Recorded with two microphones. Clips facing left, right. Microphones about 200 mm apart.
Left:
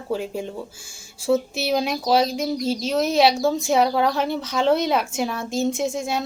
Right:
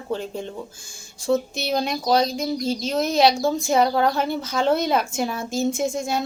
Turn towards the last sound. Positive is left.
turn(degrees=0)  # may be behind; listen again after turning